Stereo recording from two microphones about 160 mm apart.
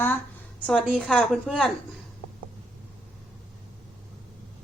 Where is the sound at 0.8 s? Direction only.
5° right (ahead or behind).